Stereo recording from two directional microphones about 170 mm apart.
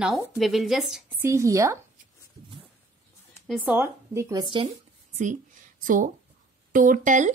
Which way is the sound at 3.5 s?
10° right (ahead or behind).